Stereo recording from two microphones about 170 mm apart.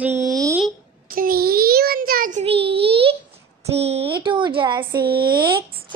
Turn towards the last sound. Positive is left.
turn(degrees=-25)  # may be behind; listen again after turning